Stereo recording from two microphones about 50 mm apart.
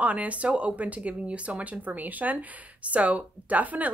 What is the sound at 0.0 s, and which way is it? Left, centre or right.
Speech, right.